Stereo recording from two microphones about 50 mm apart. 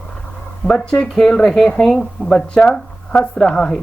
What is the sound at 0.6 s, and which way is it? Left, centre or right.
Speech, centre.